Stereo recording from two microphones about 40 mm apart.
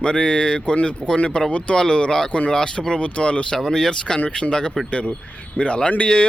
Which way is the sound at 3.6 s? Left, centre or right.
Centre.